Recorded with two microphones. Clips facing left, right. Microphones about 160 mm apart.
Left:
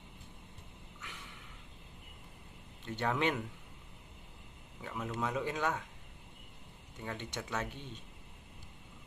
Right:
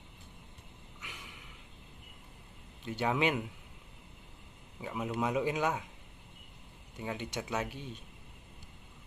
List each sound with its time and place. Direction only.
1.0 s a sound: 10° right (ahead or behind)
2.9 s speech: 10° right (ahead or behind)
4.8 s speech: 15° right (ahead or behind)
7.0 s speech: 10° right (ahead or behind)